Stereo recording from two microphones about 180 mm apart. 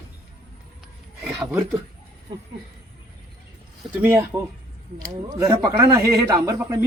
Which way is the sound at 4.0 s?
15° right (ahead or behind).